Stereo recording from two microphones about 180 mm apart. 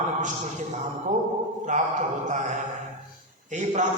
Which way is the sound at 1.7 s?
40° right (ahead or behind).